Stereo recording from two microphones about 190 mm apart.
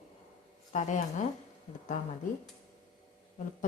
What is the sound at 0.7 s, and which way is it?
Speech, 40° left (ahead or behind).